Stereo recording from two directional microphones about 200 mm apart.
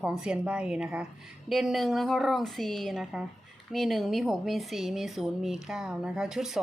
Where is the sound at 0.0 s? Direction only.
5° right (ahead or behind).